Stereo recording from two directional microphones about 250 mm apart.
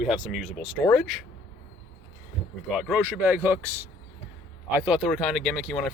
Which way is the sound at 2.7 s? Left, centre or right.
Centre.